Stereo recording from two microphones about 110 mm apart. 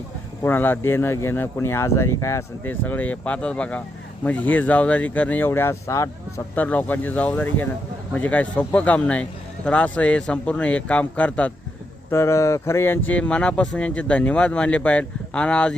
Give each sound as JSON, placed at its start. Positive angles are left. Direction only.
{"t": 0.4, "sound": "speech", "side_deg": 20}
{"t": 2.8, "sound": "speech", "side_deg": 15}
{"t": 6.6, "sound": "speech", "side_deg": 15}
{"t": 12.1, "sound": "speech", "side_deg": 25}